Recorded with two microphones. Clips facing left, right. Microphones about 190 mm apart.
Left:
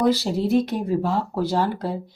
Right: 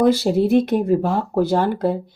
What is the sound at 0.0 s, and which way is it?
Speech, 55° right (ahead or behind).